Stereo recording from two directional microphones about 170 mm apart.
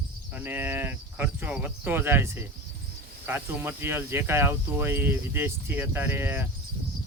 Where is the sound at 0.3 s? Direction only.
10° right (ahead or behind).